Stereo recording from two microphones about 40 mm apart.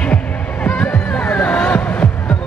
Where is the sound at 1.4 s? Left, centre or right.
Left.